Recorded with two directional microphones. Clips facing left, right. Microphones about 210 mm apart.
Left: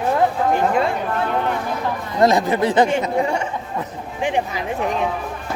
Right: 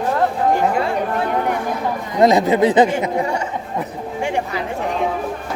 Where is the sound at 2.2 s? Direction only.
20° right (ahead or behind).